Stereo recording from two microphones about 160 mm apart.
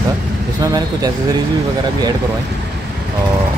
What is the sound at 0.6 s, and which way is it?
Speech, 25° right (ahead or behind).